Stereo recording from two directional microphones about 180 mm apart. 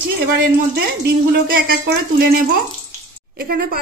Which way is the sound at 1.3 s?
70° right (ahead or behind).